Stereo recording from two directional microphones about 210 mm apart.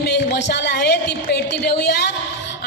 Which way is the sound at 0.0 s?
50° left (ahead or behind).